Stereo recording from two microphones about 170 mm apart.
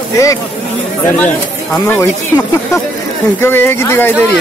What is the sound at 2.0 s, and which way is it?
Speech, 20° left (ahead or behind).